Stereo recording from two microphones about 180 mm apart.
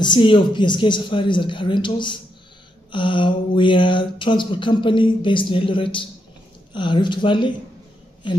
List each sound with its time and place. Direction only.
0.0 s speech: 25° left (ahead or behind)